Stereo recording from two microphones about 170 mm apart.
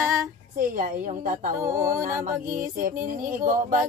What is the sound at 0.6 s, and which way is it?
Speech, 50° right (ahead or behind).